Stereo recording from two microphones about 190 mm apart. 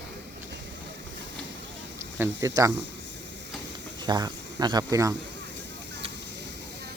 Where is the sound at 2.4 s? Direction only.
15° right (ahead or behind).